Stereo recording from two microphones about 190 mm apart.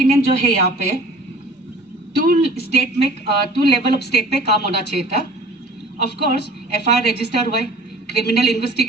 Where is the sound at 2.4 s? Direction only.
55° left (ahead or behind).